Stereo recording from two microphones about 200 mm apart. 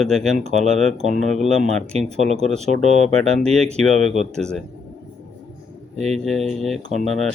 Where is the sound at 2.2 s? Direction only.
35° right (ahead or behind).